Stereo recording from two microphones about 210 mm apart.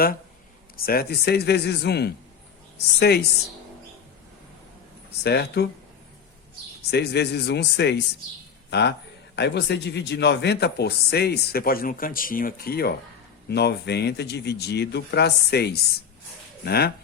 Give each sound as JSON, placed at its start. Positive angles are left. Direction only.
{"t": 0.9, "sound": "a man's voice", "side_deg": 50}
{"t": 5.2, "sound": "a man's voice", "side_deg": 50}
{"t": 6.9, "sound": "a man's voice", "side_deg": 50}